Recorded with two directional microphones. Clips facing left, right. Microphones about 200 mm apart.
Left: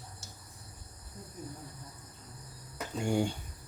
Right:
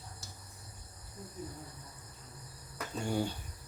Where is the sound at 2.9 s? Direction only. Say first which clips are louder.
Left 4 dB; 10° left (ahead or behind).